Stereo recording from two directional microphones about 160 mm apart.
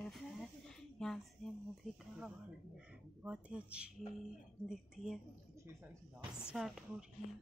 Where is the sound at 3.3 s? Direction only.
10° right (ahead or behind).